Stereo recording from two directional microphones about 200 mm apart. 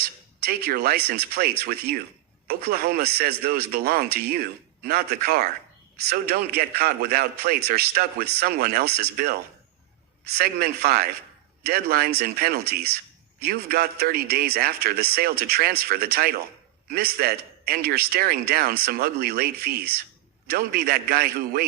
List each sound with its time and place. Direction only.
0.0 s speech: 55° right (ahead or behind)